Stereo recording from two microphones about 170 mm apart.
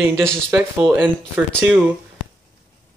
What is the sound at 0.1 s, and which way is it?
Speech, 5° left (ahead or behind).